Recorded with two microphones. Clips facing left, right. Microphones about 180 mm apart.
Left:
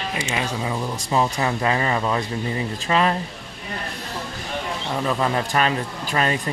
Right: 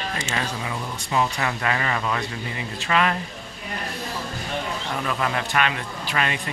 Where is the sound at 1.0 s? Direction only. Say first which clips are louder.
Left 2 dB; 30° left (ahead or behind).